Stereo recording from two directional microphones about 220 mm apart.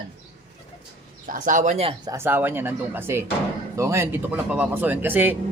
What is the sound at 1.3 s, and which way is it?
Speech, 35° right (ahead or behind).